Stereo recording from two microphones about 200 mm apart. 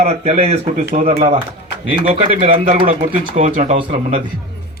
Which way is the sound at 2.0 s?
40° right (ahead or behind).